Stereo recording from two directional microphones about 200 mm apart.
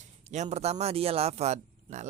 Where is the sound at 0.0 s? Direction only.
35° right (ahead or behind).